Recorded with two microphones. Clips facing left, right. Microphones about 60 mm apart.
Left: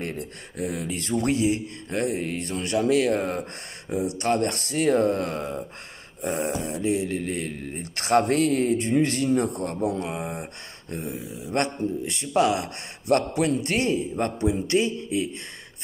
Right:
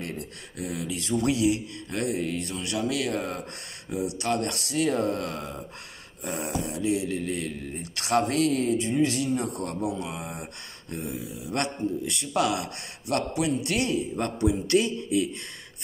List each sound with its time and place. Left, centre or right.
0.0 s speech: left
13.0 s speech: left